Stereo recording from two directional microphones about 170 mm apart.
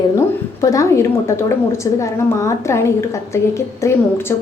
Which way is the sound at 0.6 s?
20° left (ahead or behind).